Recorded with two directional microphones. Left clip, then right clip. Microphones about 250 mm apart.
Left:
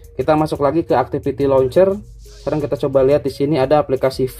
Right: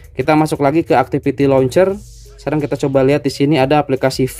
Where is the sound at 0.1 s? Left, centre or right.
Right.